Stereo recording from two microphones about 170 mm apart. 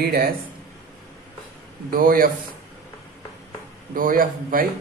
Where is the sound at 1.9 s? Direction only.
60° right (ahead or behind).